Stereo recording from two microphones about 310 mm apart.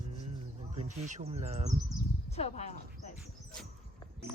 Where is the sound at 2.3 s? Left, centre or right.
Centre.